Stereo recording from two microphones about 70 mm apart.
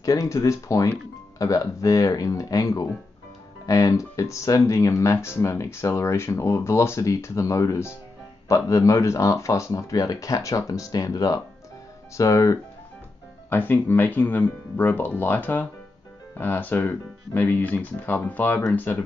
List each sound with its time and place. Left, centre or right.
0.0 s speech: left
12.2 s speech: left
13.5 s speech: left